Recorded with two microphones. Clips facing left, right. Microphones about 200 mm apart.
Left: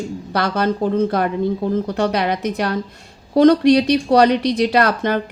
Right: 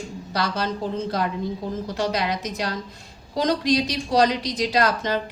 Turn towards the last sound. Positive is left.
turn(degrees=55)  # may be behind; listen again after turning